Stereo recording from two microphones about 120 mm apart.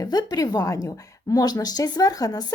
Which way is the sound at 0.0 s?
30° left (ahead or behind).